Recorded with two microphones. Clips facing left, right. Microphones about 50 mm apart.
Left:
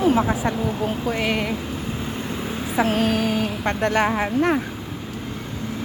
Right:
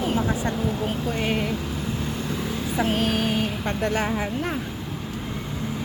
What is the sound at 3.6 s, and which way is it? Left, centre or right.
Speech, left.